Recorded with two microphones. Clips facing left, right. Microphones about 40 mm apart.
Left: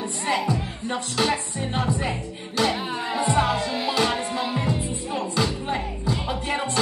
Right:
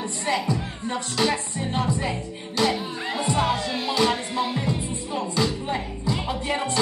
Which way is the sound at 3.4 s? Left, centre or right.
Left.